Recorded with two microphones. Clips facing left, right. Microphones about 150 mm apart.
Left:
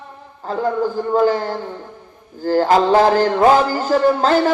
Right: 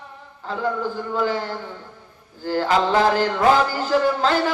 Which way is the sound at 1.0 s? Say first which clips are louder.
Left 7 dB; 45° left (ahead or behind).